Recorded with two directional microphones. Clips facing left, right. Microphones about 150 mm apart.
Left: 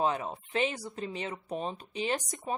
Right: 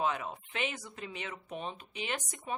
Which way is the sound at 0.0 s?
35° left (ahead or behind).